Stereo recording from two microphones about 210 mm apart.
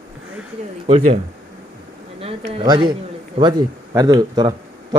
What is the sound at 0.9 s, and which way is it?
Speech, 30° right (ahead or behind).